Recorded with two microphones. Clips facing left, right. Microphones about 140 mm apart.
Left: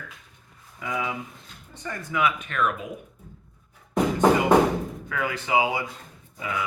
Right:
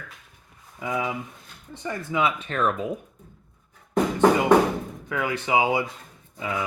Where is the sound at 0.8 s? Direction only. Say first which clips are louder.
Right 2 dB; 25° right (ahead or behind).